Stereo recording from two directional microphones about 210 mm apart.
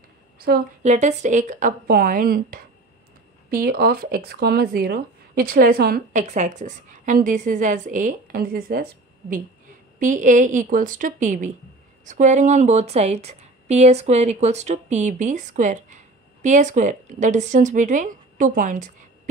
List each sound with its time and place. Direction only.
0.5 s speech: 45° right (ahead or behind)
0.9 s a woman's voice: 35° right (ahead or behind)
9.9 s a woman's voice: 40° right (ahead or behind)